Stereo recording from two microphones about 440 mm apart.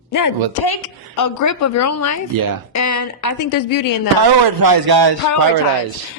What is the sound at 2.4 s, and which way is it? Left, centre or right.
Speech, right.